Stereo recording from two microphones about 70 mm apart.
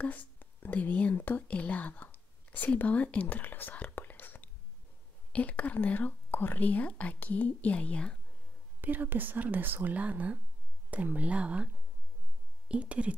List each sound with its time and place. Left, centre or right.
0.0 s speech: left
8.8 s speech: right